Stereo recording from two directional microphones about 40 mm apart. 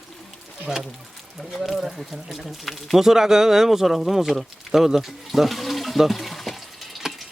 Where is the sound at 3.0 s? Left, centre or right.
Centre.